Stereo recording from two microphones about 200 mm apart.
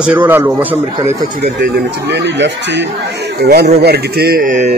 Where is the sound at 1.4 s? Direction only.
50° right (ahead or behind).